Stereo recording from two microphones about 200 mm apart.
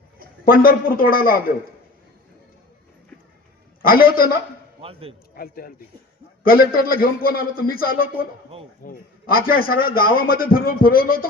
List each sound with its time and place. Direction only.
0.4 s a man's voice: 45° left (ahead or behind)
3.8 s a man's voice: 45° left (ahead or behind)
4.8 s a man's voice: 30° right (ahead or behind)
5.3 s a man's voice: 50° left (ahead or behind)